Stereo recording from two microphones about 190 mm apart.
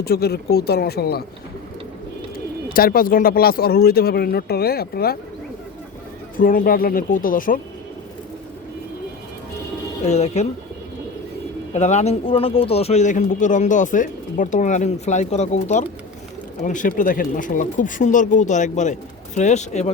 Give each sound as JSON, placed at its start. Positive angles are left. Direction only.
{"t": 0.0, "sound": "speech", "side_deg": 55}
{"t": 2.7, "sound": "speech", "side_deg": 50}
{"t": 6.3, "sound": "speech", "side_deg": 45}
{"t": 10.1, "sound": "speech", "side_deg": 35}
{"t": 11.7, "sound": "speech", "side_deg": 35}